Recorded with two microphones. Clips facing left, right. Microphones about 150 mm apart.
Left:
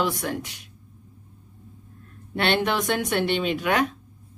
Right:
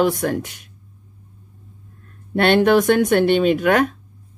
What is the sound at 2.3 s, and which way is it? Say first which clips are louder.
Speech: right 9 dB; 50° right (ahead or behind).